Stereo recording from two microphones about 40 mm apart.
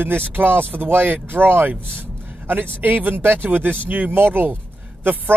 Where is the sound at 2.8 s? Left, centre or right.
Right.